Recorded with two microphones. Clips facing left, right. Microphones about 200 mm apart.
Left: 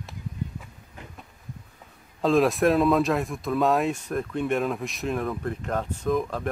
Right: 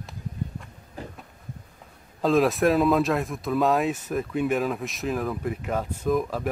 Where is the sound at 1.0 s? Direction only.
35° right (ahead or behind).